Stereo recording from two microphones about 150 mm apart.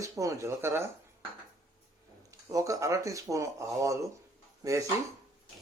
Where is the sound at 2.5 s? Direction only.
20° right (ahead or behind).